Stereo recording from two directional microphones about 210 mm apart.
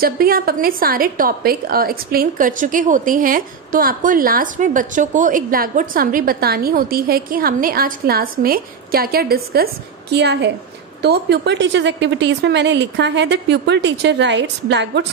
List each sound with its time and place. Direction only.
0.0 s a woman's voice: 45° right (ahead or behind)